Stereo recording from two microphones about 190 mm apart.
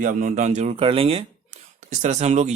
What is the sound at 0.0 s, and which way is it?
Speech, 45° right (ahead or behind).